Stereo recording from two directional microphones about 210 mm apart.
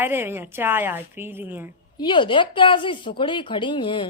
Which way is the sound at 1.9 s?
20° left (ahead or behind).